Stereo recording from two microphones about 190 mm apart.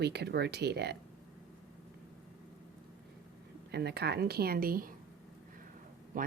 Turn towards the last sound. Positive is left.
turn(degrees=-45)  # may be behind; listen again after turning